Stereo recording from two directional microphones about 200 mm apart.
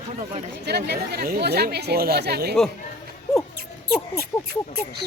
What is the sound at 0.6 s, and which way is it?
Speech, 55° right (ahead or behind).